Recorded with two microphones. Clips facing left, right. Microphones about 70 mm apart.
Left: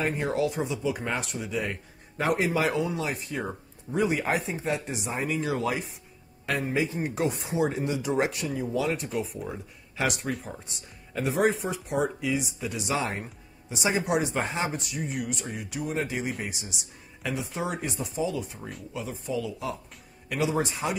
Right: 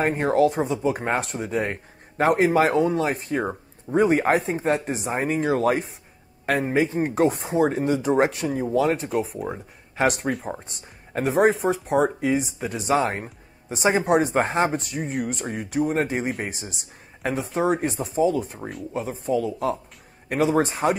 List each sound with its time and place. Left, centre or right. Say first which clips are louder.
0.0 s speech: right 7 dB; right
9.1 s speech: right 6 dB; centre
9.4 s speech: right 5 dB; right
11.6 s speech: right 7 dB; right
13.2 s music: right 3 dB; right
14.0 s speech: right 7 dB; right